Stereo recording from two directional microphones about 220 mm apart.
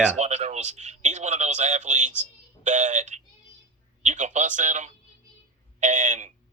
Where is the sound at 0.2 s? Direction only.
30° right (ahead or behind).